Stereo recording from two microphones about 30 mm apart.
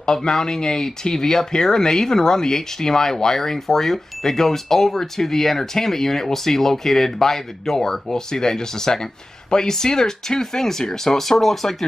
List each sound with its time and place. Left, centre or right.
0.0 s speech: centre